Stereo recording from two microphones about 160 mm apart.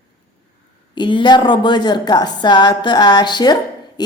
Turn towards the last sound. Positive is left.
turn(degrees=25)  # may be behind; listen again after turning